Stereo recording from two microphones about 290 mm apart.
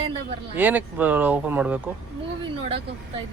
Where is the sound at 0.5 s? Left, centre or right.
Centre.